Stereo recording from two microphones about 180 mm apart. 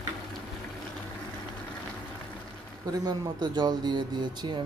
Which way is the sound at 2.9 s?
25° right (ahead or behind).